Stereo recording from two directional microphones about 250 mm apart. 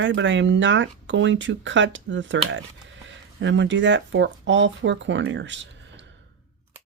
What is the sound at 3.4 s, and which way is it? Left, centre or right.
Speech, right.